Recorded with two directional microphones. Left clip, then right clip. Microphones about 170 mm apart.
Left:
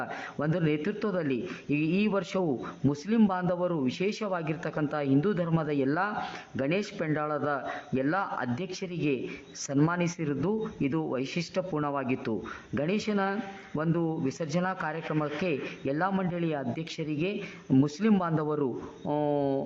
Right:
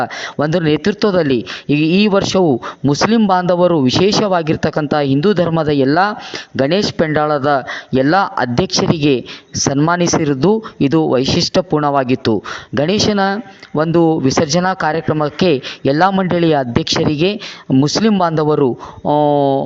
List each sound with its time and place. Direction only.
0.0 s speech: 45° right (ahead or behind)
9.6 s speech: 35° right (ahead or behind)
19.0 s speech: 20° right (ahead or behind)